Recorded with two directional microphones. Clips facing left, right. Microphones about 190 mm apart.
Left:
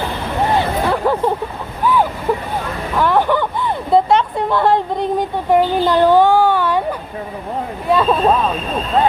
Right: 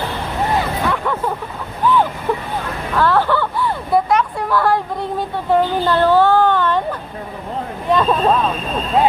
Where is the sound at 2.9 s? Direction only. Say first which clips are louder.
Left 1 dB; 15° left (ahead or behind).